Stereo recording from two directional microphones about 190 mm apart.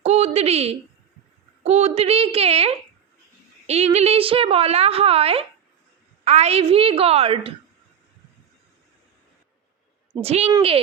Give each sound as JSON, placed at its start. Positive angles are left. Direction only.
{"t": 0.0, "sound": "a sound", "side_deg": -35}
{"t": 1.6, "sound": "a woman's voice", "side_deg": -35}
{"t": 10.2, "sound": "a woman's voice", "side_deg": -35}